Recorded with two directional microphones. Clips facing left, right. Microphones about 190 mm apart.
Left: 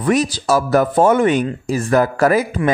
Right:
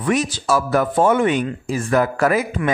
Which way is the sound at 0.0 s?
35° left (ahead or behind).